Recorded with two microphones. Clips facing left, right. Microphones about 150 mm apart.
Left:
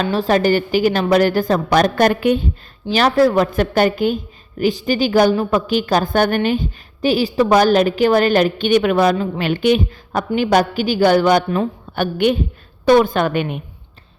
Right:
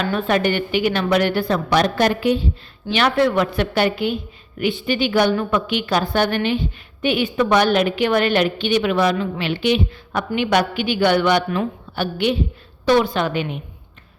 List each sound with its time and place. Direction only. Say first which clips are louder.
0.0 s a woman's voice: left 3 dB; 35° left (ahead or behind); by 2.5 s 55° left (ahead or behind)
2.9 s a woman's voice: left 4 dB; 40° left (ahead or behind); by 13.6 s 55° left (ahead or behind)